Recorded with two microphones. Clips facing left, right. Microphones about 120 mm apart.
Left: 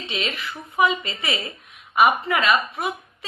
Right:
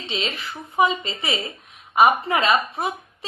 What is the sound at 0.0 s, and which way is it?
A woman's voice, 30° right (ahead or behind).